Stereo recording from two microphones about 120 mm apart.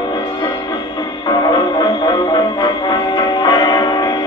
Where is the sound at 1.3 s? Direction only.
35° left (ahead or behind).